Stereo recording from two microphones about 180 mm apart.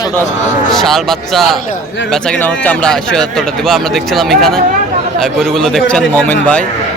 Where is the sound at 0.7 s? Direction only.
Centre (ahead or behind).